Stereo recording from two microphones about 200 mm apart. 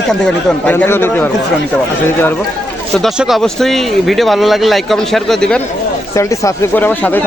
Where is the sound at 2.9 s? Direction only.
Centre (ahead or behind).